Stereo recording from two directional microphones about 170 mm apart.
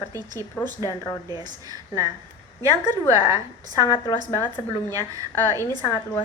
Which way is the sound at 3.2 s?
20° right (ahead or behind).